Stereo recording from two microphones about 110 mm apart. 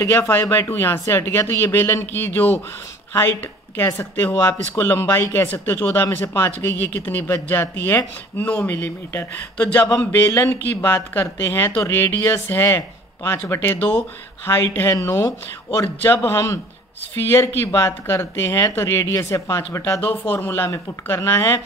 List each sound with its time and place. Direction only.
0.0 s speech: 25° left (ahead or behind)
10.2 s speech: 30° left (ahead or behind)